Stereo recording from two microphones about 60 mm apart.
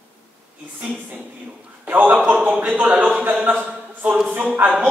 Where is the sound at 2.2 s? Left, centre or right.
Centre.